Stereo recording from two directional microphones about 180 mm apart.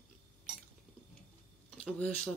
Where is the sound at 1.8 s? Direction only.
10° left (ahead or behind).